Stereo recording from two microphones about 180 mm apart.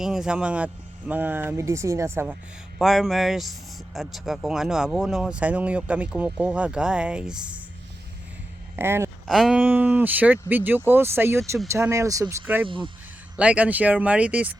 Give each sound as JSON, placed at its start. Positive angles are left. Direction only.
{"t": 0.0, "sound": "speech", "side_deg": -5}
{"t": 2.7, "sound": "speech", "side_deg": 0}
{"t": 8.7, "sound": "speech", "side_deg": -15}
{"t": 9.2, "sound": "speech", "side_deg": 0}
{"t": 12.6, "sound": "speech", "side_deg": -30}
{"t": 13.3, "sound": "speech", "side_deg": -5}